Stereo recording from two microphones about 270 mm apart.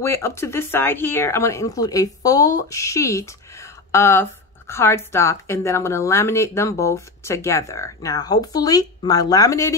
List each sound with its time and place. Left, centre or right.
0.0 s a woman's voice: centre